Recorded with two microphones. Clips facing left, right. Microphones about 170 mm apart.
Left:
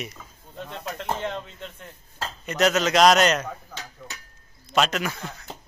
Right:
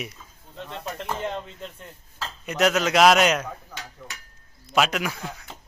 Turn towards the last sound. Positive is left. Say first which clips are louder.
# even
turn(degrees=-5)  # may be behind; listen again after turning